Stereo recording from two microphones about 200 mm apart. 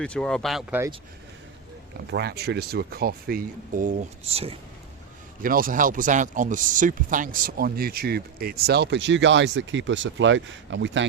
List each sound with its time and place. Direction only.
0.0 s speech: 5° left (ahead or behind)
2.0 s speech: 55° right (ahead or behind); by 4.5 s 30° right (ahead or behind)
5.4 s speech: 45° right (ahead or behind); by 11.0 s 65° right (ahead or behind)